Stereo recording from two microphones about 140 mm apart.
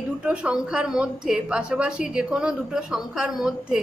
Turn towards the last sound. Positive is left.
turn(degrees=-5)  # may be behind; listen again after turning